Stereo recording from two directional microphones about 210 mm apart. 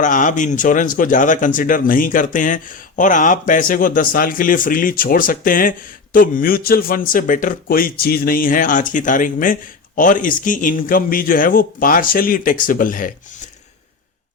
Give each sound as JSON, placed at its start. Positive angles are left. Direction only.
{"t": 0.0, "sound": "speech", "side_deg": 35}